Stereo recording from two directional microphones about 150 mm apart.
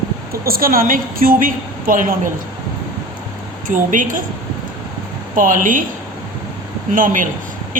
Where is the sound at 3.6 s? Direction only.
60° right (ahead or behind).